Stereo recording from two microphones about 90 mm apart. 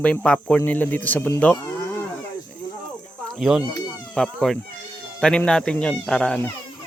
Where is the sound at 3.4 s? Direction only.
Centre (ahead or behind).